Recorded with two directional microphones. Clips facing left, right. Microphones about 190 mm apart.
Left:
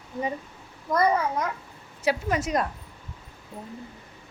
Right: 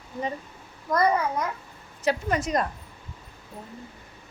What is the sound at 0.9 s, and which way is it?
Child singing, 5° left (ahead or behind).